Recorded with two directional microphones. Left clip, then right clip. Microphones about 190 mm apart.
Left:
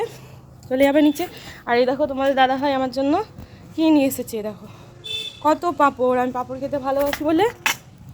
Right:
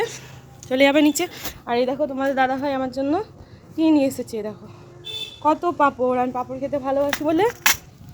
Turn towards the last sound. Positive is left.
turn(degrees=-55)  # may be behind; listen again after turning